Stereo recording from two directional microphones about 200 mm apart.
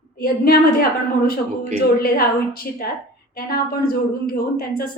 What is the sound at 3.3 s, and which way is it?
A woman's voice, 50° left (ahead or behind).